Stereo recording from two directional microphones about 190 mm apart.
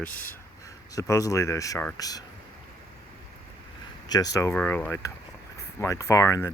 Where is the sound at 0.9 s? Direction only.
15° left (ahead or behind).